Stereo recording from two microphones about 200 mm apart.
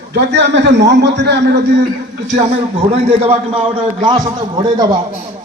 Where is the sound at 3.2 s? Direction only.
30° right (ahead or behind).